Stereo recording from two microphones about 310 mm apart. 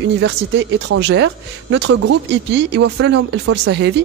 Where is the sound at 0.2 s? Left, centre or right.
Right.